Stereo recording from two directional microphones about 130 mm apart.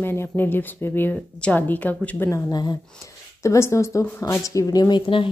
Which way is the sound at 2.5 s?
35° left (ahead or behind).